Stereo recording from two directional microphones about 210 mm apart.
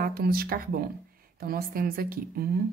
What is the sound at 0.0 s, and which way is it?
A woman's voice, 45° right (ahead or behind).